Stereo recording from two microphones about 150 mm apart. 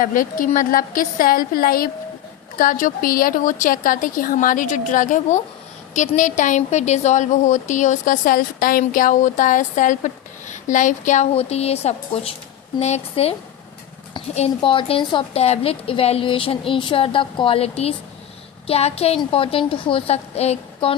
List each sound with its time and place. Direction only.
0.0 s a woman's voice: 65° left (ahead or behind)
2.6 s speech: 65° left (ahead or behind)
6.6 s a woman's voice: 50° left (ahead or behind)
14.3 s a woman's voice: 40° left (ahead or behind)